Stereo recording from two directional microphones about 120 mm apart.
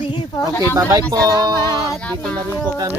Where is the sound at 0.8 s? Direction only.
30° right (ahead or behind).